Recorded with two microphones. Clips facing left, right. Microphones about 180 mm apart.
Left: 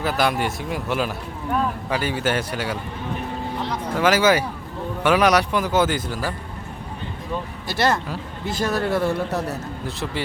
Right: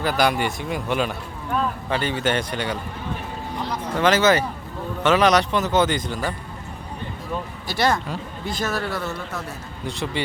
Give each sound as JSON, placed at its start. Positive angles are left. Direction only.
{"t": 0.0, "sound": "speech", "side_deg": 0}
{"t": 7.7, "sound": "speech", "side_deg": 0}
{"t": 8.9, "sound": "speech", "side_deg": 30}